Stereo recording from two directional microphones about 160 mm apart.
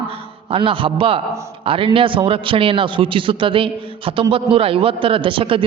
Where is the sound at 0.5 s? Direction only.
35° right (ahead or behind).